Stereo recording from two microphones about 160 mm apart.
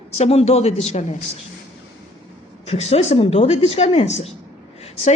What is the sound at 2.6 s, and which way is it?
Speech, 40° left (ahead or behind).